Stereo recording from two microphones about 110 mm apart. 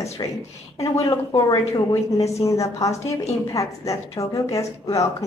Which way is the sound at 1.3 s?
35° left (ahead or behind).